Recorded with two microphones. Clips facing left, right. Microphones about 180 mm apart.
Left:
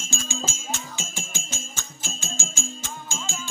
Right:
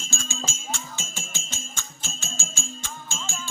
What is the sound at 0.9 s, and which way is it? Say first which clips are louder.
Music: left 2 dB; 15° left (ahead or behind).